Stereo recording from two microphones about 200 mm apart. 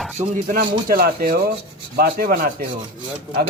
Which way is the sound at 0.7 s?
45° right (ahead or behind).